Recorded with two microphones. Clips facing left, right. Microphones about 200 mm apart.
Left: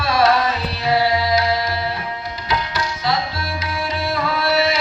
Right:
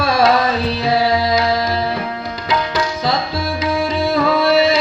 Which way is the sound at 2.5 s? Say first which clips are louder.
Right 5 dB; 90° right.